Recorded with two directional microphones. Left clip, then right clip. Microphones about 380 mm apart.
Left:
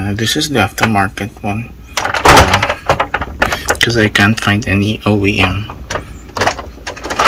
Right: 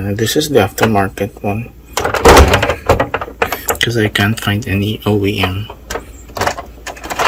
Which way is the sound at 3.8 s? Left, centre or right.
Centre.